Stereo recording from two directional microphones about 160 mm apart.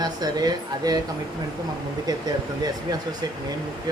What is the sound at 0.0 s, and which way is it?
Speech, 25° right (ahead or behind).